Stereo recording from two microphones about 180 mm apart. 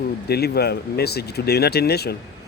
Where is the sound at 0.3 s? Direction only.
60° left (ahead or behind).